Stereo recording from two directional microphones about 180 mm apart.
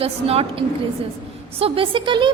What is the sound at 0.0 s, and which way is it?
A woman's voice, 35° right (ahead or behind).